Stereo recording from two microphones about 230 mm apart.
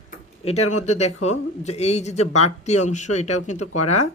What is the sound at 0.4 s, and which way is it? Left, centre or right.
A man's voice, left.